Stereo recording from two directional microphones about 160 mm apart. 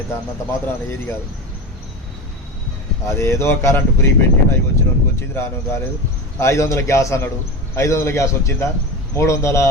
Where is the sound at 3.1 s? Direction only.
15° left (ahead or behind).